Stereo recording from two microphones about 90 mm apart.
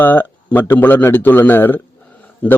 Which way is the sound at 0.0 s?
20° left (ahead or behind).